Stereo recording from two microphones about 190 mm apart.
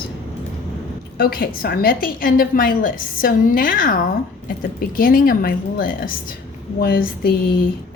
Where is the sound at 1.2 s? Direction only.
50° left (ahead or behind).